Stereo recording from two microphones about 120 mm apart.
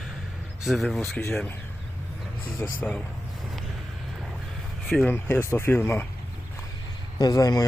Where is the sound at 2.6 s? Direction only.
10° left (ahead or behind).